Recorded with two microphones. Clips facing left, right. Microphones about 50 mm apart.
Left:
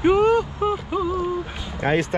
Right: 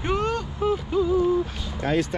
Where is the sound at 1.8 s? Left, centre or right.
Left.